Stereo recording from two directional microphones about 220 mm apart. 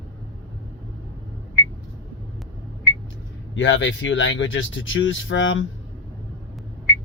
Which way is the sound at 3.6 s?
55° left (ahead or behind).